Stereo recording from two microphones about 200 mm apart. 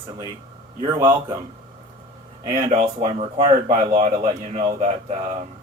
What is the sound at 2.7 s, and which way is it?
A man's voice, 35° right (ahead or behind).